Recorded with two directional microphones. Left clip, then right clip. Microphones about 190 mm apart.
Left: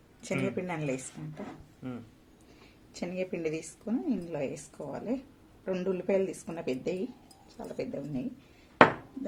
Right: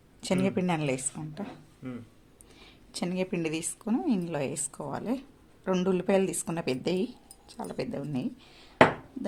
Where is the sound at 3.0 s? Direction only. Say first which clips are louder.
Right 2 dB; 45° right (ahead or behind).